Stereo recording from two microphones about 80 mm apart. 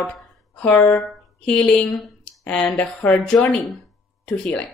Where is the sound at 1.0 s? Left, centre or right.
Centre.